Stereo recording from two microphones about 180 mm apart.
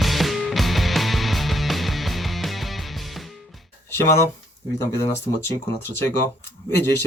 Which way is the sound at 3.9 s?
15° left (ahead or behind).